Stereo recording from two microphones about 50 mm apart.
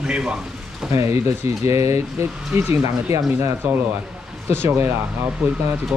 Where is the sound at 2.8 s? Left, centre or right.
Right.